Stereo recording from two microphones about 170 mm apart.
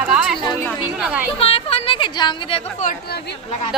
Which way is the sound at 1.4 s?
35° left (ahead or behind).